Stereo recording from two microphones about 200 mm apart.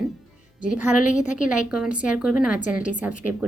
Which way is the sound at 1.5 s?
5° right (ahead or behind).